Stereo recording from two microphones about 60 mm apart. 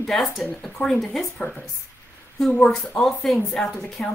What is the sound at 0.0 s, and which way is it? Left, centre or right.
Speech, centre.